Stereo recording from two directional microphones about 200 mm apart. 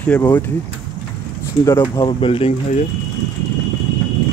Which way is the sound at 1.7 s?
20° left (ahead or behind).